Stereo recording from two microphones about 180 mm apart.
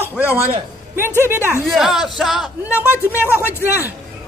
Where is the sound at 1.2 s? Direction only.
10° right (ahead or behind).